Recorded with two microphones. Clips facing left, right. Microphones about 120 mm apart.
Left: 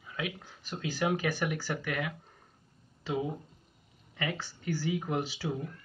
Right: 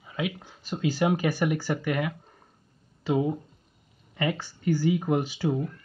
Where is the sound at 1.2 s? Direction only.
45° right (ahead or behind).